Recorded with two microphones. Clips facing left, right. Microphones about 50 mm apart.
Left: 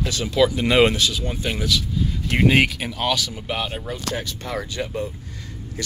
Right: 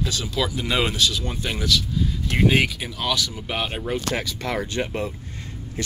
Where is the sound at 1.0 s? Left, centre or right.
Left.